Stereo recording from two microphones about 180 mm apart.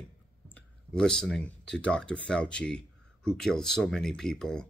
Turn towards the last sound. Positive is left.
turn(degrees=5)  # may be behind; listen again after turning